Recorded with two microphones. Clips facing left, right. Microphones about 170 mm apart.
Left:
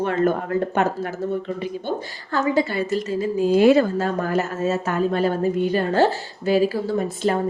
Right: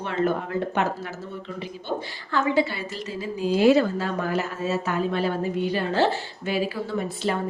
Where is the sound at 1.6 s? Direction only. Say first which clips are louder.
Left 4 dB; 45° left (ahead or behind).